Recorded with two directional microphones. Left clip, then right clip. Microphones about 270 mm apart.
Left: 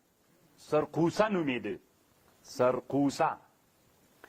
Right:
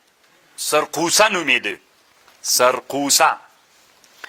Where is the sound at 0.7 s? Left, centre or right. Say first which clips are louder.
Right 11 dB; centre.